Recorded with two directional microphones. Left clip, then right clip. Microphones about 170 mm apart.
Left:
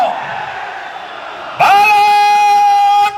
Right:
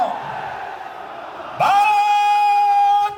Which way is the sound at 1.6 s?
25° left (ahead or behind).